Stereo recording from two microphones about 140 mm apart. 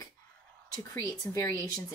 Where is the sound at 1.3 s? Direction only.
25° left (ahead or behind).